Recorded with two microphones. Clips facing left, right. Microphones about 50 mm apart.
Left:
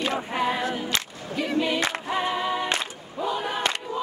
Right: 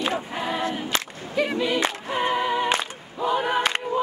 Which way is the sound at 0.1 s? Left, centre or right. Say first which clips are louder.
Left 2 dB; left.